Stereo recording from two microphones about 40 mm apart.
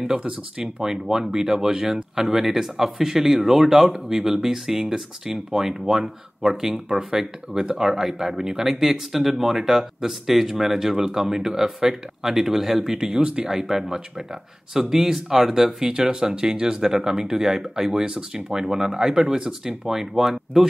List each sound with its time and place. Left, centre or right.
0.0 s speech: centre
12.7 s speech: centre